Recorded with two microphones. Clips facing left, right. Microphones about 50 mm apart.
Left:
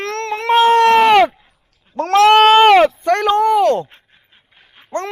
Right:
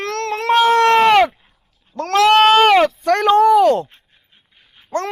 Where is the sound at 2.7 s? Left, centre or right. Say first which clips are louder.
Left 3 dB; left.